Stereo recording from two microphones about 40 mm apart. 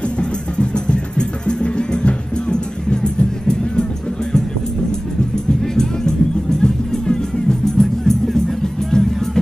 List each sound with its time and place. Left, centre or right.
0.2 s music: left
6.6 s music: centre